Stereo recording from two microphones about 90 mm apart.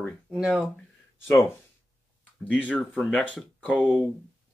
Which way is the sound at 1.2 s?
25° left (ahead or behind).